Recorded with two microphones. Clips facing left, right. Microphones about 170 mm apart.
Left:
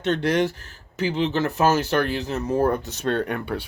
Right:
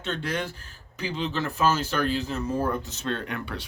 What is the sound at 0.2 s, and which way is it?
Speech, 70° left (ahead or behind).